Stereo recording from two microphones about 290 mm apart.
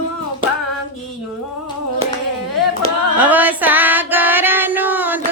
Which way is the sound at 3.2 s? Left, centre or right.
Centre.